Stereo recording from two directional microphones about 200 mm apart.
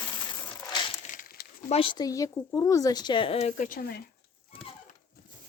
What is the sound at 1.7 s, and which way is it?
Speech, 25° left (ahead or behind).